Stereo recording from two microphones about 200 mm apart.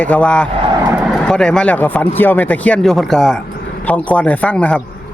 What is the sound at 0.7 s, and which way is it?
Vehicle, 20° right (ahead or behind).